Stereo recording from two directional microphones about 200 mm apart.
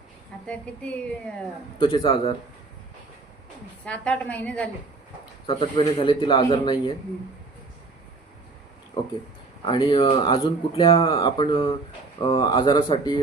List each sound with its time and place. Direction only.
0.4 s a woman's voice: 5° left (ahead or behind)
1.8 s speech: 25° left (ahead or behind)
3.8 s a woman's voice: 5° left (ahead or behind)
5.5 s speech: 25° left (ahead or behind)
9.0 s speech: 25° left (ahead or behind)